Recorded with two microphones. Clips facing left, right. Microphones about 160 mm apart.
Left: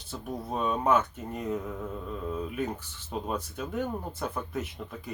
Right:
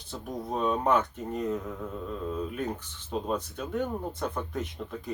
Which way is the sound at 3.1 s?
5° left (ahead or behind).